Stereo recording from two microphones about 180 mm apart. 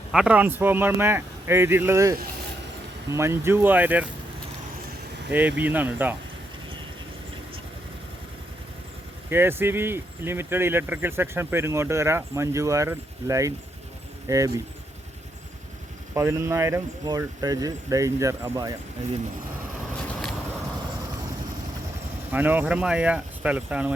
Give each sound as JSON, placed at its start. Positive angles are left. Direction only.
{"t": 0.1, "sound": "speech", "side_deg": -5}
{"t": 5.3, "sound": "speech", "side_deg": -10}
{"t": 9.3, "sound": "speech", "side_deg": -10}
{"t": 16.1, "sound": "speech", "side_deg": -15}
{"t": 22.3, "sound": "speech", "side_deg": -10}